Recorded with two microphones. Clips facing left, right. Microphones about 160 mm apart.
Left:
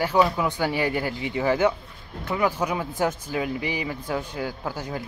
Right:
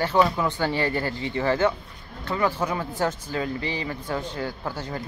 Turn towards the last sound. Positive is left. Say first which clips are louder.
# left 1 dB
turn(degrees=10)  # may be behind; listen again after turning